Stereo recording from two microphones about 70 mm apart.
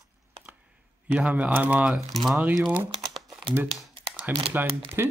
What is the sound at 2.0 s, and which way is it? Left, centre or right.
Speech, centre.